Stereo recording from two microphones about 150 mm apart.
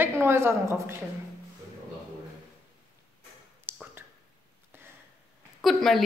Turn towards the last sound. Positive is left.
turn(degrees=0)  # may be behind; listen again after turning